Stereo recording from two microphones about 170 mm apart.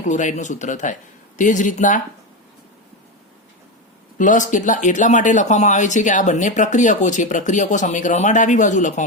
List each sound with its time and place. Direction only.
0.1 s speech: 45° left (ahead or behind)
4.2 s speech: 50° left (ahead or behind)